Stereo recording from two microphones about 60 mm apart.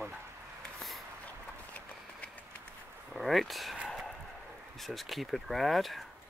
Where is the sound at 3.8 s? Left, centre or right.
Centre.